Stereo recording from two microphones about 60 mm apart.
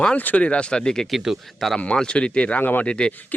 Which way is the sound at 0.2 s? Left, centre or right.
Left.